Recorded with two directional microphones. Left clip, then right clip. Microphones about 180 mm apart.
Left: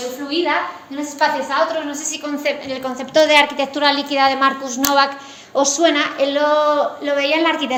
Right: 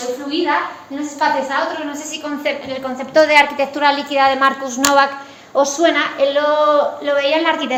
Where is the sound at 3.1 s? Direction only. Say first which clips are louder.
Right 1 dB; 35° left (ahead or behind); by 5.1 s 15° left (ahead or behind).